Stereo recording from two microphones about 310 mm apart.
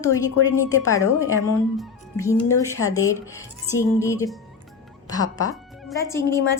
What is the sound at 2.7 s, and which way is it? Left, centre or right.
A woman's voice, centre.